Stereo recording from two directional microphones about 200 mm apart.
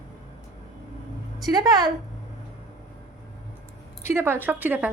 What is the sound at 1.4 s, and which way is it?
Speech, 20° right (ahead or behind).